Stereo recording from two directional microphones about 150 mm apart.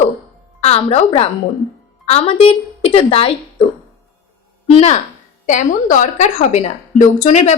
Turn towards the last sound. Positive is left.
turn(degrees=50)  # may be behind; listen again after turning